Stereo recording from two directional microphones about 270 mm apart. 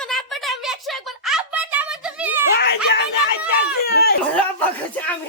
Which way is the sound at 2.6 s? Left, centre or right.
Left.